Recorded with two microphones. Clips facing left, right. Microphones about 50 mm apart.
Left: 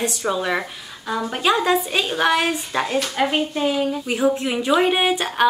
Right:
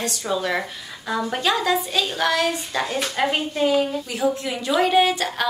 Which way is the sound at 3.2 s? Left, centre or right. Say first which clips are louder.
Even; centre.